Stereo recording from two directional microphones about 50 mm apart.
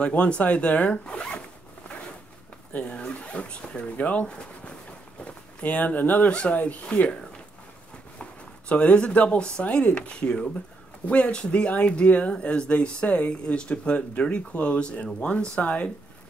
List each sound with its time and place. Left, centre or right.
0.0 s speech: left
2.8 s speech: left
8.2 s speech: left